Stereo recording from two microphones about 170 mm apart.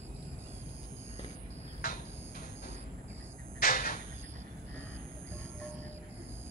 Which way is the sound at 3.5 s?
55° left (ahead or behind).